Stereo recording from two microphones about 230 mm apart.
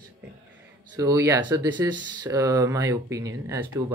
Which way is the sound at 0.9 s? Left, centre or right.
Centre.